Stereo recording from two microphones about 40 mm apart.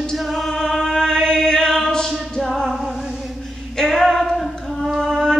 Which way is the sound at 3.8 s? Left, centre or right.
Centre.